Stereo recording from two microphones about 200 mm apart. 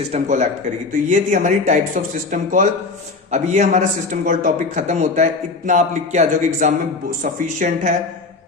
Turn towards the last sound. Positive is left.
turn(degrees=-35)  # may be behind; listen again after turning